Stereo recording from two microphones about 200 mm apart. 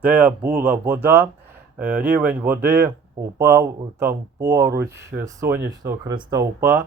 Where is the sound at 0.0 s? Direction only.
10° right (ahead or behind).